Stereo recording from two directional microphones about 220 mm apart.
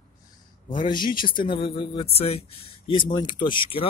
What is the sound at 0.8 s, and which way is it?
Speech, 20° left (ahead or behind).